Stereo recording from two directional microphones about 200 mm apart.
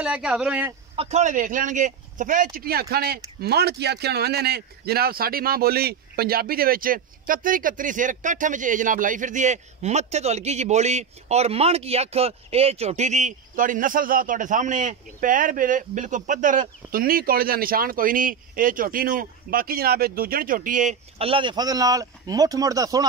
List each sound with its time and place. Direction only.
0.0 s speech: 5° right (ahead or behind)
0.9 s a man's voice: 35° right (ahead or behind)
21.2 s speech: 25° right (ahead or behind)